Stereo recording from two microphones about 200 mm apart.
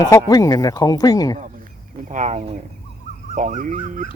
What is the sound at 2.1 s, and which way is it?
Speech, 35° right (ahead or behind).